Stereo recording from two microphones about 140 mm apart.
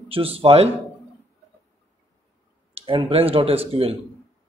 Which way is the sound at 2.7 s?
40° right (ahead or behind).